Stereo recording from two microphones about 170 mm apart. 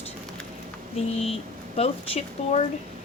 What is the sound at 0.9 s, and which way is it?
A woman's voice, 40° left (ahead or behind).